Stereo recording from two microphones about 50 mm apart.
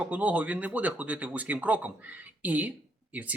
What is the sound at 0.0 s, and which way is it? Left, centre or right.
Speech, right.